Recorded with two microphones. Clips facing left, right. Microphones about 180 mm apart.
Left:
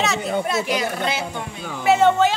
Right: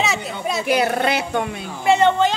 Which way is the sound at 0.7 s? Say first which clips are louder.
Right 5 dB; 60° right (ahead or behind).